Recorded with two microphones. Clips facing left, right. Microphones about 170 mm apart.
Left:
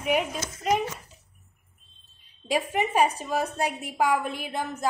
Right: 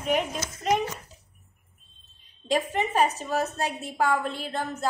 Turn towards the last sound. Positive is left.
turn(degrees=15)  # may be behind; listen again after turning